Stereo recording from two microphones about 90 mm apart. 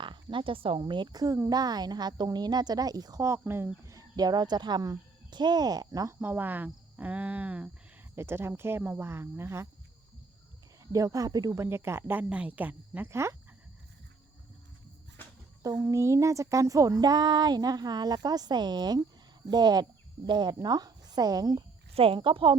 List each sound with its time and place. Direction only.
0.0 s speech: 65° right (ahead or behind); by 0.8 s 90° right
0.8 s a sound: 55° right (ahead or behind); by 3.7 s 25° right (ahead or behind)
3.8 s speech: 40° right (ahead or behind)
6.1 s speech: 20° right (ahead or behind)
8.1 s speech: 30° right (ahead or behind)
10.9 s speech: 40° right (ahead or behind)
11.5 s speech: 30° right (ahead or behind)
15.6 s a sound: 35° right (ahead or behind)
19.5 s speech: 50° right (ahead or behind)
21.9 s speech: 85° right